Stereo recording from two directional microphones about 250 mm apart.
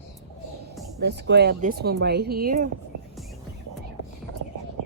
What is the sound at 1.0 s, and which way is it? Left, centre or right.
Speech, right.